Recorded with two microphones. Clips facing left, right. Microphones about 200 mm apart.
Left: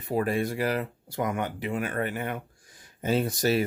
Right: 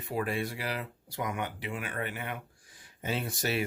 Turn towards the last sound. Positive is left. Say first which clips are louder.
# left 7 dB
turn(degrees=40)  # may be behind; listen again after turning